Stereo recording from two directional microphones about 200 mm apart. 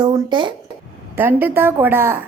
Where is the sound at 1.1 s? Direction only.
10° right (ahead or behind).